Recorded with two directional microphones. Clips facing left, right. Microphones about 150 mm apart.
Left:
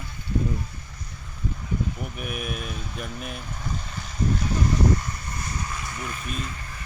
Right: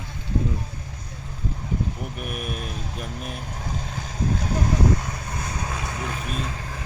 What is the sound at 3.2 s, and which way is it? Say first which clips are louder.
Speech: right 1 dB; 40° right (ahead or behind).